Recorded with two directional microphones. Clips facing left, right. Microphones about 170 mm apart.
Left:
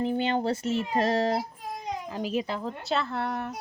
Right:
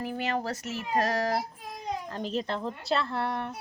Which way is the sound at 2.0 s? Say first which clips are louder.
Left 4 dB; 10° left (ahead or behind).